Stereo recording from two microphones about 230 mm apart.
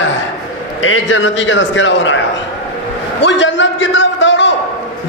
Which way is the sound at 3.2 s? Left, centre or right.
Left.